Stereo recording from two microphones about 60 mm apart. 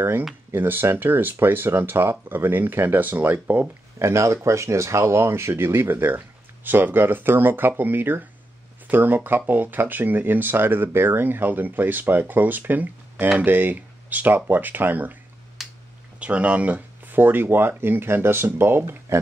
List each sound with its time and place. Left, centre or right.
0.5 s speech: right
4.0 s speech: right
15.6 s finger snapping: centre
16.2 s speech: right